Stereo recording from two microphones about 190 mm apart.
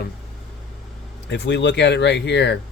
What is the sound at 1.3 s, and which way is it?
Speech, 65° left (ahead or behind).